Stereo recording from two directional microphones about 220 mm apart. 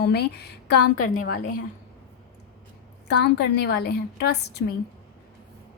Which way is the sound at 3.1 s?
50° left (ahead or behind).